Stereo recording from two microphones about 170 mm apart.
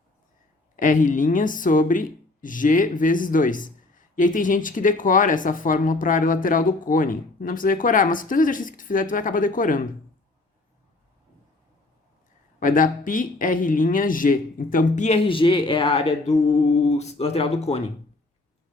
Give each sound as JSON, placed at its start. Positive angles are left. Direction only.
{"t": 0.8, "sound": "speech", "side_deg": 50}
{"t": 12.5, "sound": "speech", "side_deg": 50}